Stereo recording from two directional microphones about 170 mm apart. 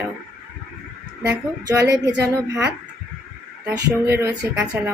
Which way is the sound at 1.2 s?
15° right (ahead or behind).